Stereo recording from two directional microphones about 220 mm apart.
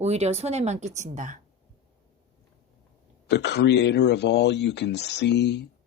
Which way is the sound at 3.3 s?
50° left (ahead or behind).